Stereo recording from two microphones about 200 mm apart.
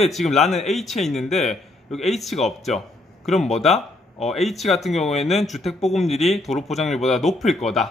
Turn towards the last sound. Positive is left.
turn(degrees=0)  # may be behind; listen again after turning